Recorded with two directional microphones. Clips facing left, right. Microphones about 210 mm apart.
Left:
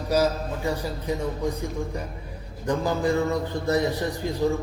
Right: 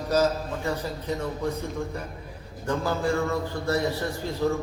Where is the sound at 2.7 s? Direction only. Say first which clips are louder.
Left 2 dB; 15° left (ahead or behind).